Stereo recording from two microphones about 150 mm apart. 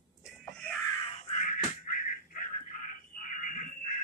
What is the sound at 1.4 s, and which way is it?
Music, 65° left (ahead or behind).